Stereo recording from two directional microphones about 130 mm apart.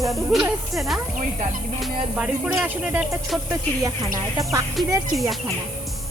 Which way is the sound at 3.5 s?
25° right (ahead or behind).